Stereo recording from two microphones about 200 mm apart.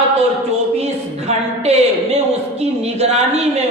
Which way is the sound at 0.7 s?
30° right (ahead or behind).